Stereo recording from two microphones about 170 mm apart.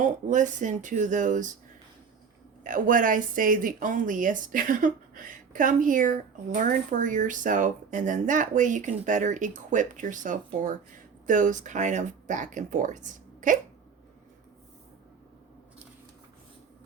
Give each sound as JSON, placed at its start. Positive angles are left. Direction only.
{"t": 0.0, "sound": "speech", "side_deg": -50}
{"t": 2.6, "sound": "speech", "side_deg": -50}